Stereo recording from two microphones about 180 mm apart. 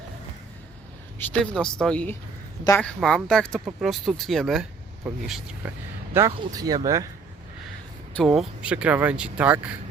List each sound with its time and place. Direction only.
1.2 s speech: 5° left (ahead or behind)
5.6 s speech: 10° right (ahead or behind)
8.1 s speech: centre (ahead or behind)